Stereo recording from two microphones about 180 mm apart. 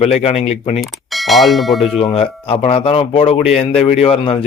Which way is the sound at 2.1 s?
35° left (ahead or behind).